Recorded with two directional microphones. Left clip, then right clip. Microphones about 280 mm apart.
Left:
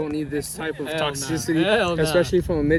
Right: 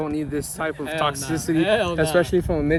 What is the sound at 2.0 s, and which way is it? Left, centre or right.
Speech, centre.